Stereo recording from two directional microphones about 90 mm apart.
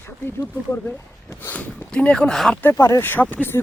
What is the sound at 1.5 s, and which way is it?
Speech, 15° left (ahead or behind).